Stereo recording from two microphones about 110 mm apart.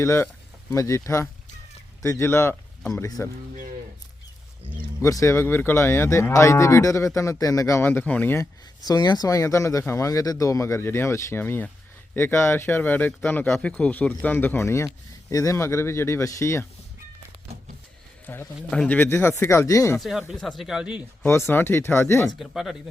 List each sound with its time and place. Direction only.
0.0 s cattle: 25° left (ahead or behind)
2.9 s speech: 30° left (ahead or behind)
4.9 s cattle: 30° left (ahead or behind)
8.4 s cattle: 35° left (ahead or behind); by 11.7 s 20° left (ahead or behind)
12.1 s speech: 20° left (ahead or behind)
15.3 s cattle: 30° left (ahead or behind)
18.3 s a man's voice: 15° left (ahead or behind)
18.9 s cattle: 20° left (ahead or behind)
20.0 s speech: centre (ahead or behind)
21.2 s cattle: 20° left (ahead or behind)
22.4 s speech: centre (ahead or behind)